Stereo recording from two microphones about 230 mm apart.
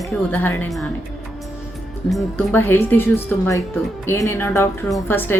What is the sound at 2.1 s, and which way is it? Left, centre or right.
A woman's voice, centre.